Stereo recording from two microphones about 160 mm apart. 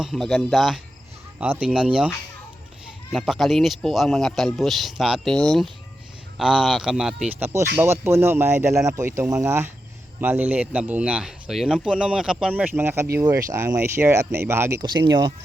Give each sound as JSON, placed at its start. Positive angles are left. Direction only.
{"t": 0.0, "sound": "a man's voice", "side_deg": 0}
{"t": 1.8, "sound": "a man's voice", "side_deg": 0}
{"t": 14.8, "sound": "speech", "side_deg": -30}